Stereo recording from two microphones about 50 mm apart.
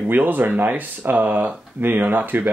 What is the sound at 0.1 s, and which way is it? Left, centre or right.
Speech, right.